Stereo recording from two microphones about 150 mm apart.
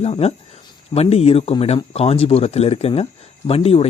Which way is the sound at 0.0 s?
45° left (ahead or behind).